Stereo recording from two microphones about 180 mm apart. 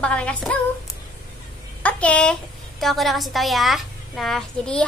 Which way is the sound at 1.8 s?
5° left (ahead or behind).